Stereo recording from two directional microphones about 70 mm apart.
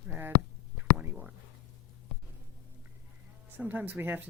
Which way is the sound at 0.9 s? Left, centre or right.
Centre.